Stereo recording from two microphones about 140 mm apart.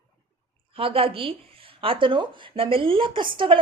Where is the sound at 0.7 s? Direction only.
40° right (ahead or behind).